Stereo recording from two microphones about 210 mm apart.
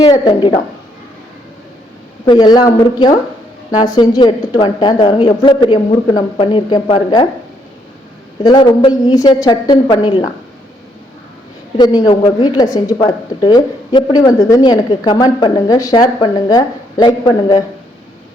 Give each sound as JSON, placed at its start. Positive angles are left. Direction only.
{"t": 0.1, "sound": "a woman's voice", "side_deg": 20}
{"t": 2.2, "sound": "a woman's voice", "side_deg": 20}
{"t": 8.4, "sound": "a woman's voice", "side_deg": 20}
{"t": 11.8, "sound": "a woman's voice", "side_deg": 20}